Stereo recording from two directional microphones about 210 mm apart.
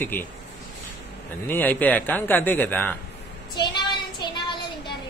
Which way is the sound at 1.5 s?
10° left (ahead or behind).